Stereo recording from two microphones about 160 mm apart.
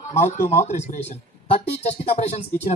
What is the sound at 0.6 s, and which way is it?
Speech, 45° left (ahead or behind).